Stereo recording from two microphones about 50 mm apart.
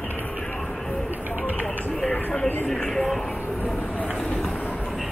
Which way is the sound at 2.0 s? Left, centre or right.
Centre.